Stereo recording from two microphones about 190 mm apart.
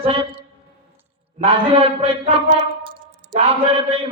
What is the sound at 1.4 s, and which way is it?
Speech, 30° right (ahead or behind).